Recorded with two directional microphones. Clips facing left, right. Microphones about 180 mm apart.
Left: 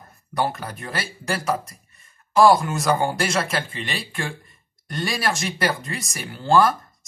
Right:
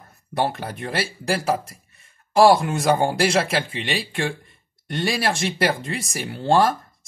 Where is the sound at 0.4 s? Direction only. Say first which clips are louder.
Right 1 dB; 30° right (ahead or behind).